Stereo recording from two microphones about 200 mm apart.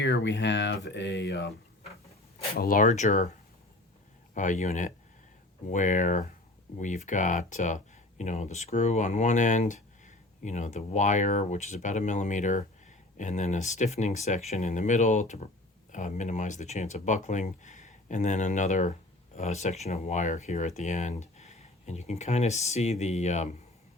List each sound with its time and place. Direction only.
0.0 s speech: 60° left (ahead or behind)
2.6 s speech: 45° left (ahead or behind)
4.4 s speech: 40° left (ahead or behind)